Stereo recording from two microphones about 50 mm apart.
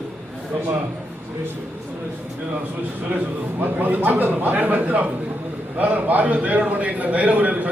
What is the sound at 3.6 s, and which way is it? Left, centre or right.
A man's voice, right.